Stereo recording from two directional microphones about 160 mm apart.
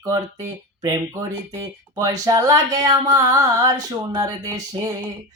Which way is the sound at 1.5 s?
20° right (ahead or behind).